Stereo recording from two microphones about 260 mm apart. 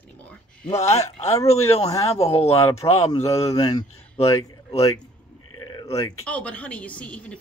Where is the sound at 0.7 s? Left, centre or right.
Left.